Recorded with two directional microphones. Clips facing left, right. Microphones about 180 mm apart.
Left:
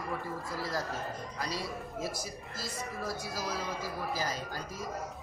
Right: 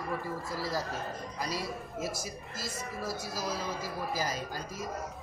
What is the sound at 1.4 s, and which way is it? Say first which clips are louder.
Speech: right 2 dB; 10° right (ahead or behind).